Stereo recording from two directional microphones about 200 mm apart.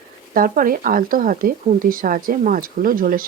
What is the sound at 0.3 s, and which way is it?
Speech, 45° right (ahead or behind).